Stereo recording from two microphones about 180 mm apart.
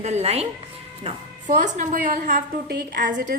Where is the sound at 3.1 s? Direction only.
45° right (ahead or behind).